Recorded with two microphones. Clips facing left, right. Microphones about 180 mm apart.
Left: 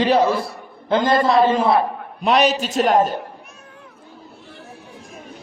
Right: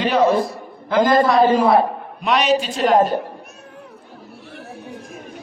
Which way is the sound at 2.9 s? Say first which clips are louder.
Right 3 dB; 45° right (ahead or behind).